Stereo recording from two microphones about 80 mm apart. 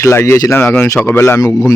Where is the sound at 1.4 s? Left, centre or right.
Left.